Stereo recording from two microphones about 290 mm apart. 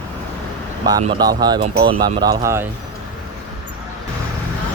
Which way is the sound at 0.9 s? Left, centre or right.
Centre.